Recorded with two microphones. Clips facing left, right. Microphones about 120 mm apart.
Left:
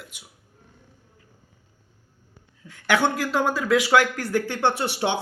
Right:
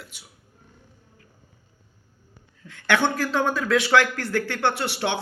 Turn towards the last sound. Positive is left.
turn(degrees=15)  # may be behind; listen again after turning